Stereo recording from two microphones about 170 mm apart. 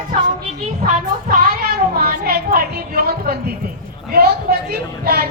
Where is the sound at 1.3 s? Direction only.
60° right (ahead or behind).